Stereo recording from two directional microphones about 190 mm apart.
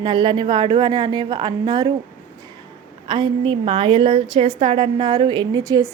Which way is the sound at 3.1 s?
25° right (ahead or behind).